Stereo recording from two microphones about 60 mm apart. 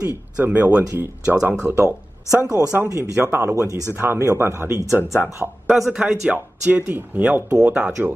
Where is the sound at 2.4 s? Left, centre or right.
Right.